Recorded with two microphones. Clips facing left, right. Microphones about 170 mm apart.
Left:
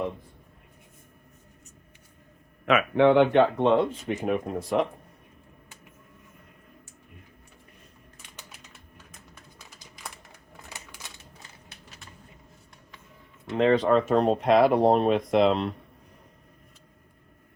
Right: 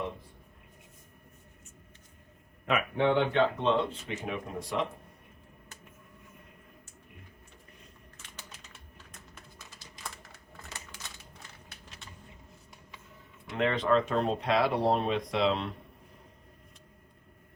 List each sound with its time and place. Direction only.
2.6 s speech: 90° left; by 4.9 s 50° left (ahead or behind)
9.6 s typing: 15° left (ahead or behind)
13.5 s speech: 35° left (ahead or behind)